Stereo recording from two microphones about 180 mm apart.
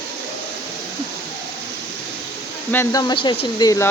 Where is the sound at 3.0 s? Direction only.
25° left (ahead or behind).